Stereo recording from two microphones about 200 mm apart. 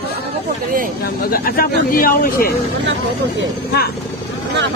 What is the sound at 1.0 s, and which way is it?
Speech, 45° left (ahead or behind).